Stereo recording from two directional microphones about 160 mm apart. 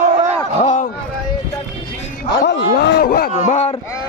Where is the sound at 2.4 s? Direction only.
90° left; by 3.2 s 75° left (ahead or behind).